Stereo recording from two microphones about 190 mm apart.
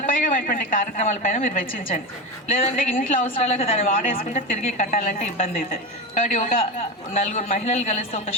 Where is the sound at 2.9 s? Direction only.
45° left (ahead or behind).